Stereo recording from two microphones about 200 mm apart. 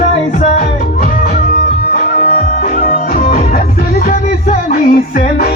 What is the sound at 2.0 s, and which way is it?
Music, 40° left (ahead or behind).